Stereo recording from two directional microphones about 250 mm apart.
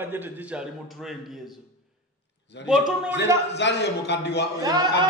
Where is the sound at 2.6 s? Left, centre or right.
Left.